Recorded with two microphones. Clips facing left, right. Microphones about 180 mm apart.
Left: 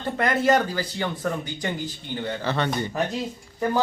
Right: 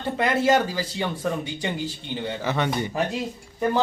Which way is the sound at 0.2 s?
5° right (ahead or behind).